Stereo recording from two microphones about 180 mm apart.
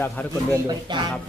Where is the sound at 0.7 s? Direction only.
25° right (ahead or behind).